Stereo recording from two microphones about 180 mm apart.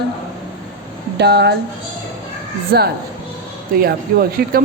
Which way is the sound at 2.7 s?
60° right (ahead or behind).